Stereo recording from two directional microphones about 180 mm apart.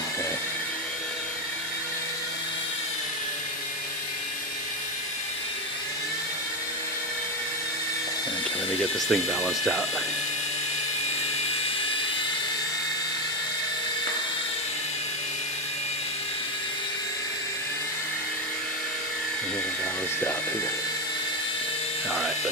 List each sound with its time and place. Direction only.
9.0 s speech: centre (ahead or behind)